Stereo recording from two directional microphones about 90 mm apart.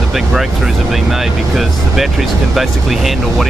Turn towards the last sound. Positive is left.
turn(degrees=0)  # may be behind; listen again after turning